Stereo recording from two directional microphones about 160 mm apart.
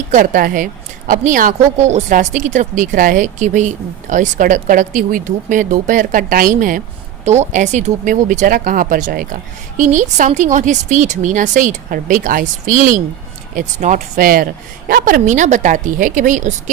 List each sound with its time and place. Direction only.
0.1 s speech: 60° right (ahead or behind)
7.3 s speech: 45° right (ahead or behind)